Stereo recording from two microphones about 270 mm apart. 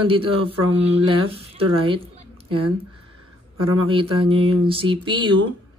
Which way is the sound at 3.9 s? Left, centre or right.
Centre.